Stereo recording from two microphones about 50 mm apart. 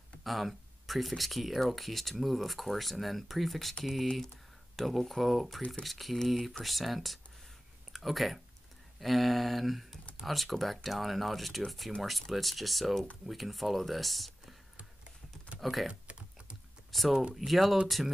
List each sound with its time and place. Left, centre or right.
0.2 s speech: centre
15.6 s speech: centre
15.9 s typing: right
16.9 s speech: centre